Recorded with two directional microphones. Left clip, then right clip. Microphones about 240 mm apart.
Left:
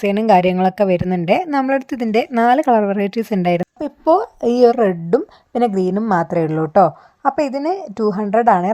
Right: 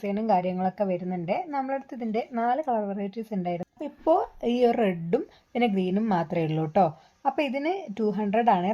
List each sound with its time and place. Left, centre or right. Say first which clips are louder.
0.0 s a woman's voice: left 12 dB; left